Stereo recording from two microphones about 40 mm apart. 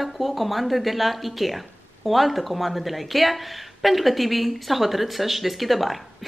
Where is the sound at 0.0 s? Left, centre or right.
Centre.